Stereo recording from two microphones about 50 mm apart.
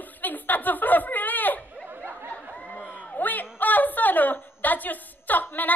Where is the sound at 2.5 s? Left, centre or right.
Left.